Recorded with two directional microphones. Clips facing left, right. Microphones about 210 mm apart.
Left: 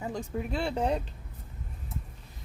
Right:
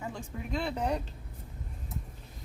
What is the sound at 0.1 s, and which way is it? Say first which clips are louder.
Speech: left 4 dB; 35° left (ahead or behind).